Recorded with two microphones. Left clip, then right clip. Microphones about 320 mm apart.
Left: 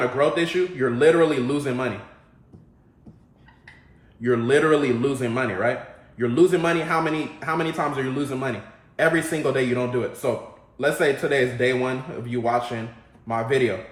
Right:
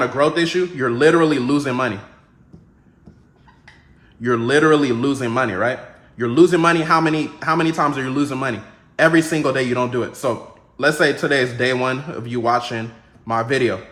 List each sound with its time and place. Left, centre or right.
0.0 s a man's voice: centre
4.2 s a man's voice: centre